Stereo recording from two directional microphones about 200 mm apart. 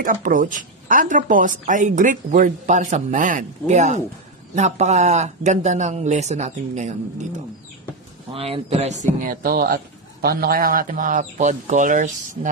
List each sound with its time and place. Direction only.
0.0 s speech: 40° right (ahead or behind)
8.3 s speech: 30° right (ahead or behind)